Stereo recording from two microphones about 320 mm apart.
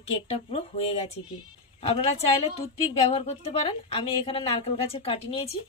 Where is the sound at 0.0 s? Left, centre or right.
Centre.